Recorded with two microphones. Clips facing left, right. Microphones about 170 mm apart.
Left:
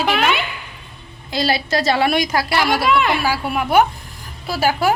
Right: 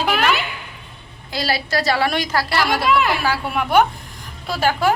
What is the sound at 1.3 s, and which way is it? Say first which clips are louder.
A woman's voice: left 3 dB; 20° left (ahead or behind).